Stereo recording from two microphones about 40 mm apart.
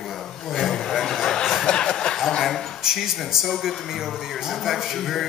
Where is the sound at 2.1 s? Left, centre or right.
Centre.